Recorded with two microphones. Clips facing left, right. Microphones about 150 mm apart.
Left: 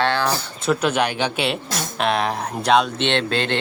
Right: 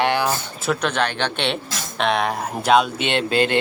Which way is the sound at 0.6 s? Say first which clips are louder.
Left 3 dB; 5° left (ahead or behind).